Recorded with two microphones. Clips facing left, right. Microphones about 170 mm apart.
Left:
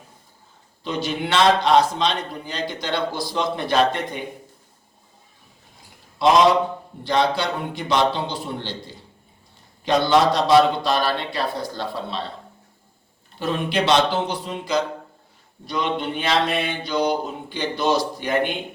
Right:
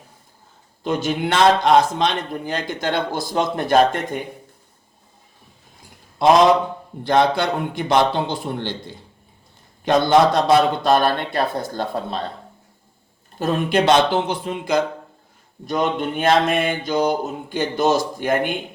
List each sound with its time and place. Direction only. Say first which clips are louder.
0.9 s a man's voice: right 4 dB; 50° right (ahead or behind)
6.2 s a man's voice: right 2 dB; 50° right (ahead or behind)
13.4 s a man's voice: right 4 dB; 45° right (ahead or behind)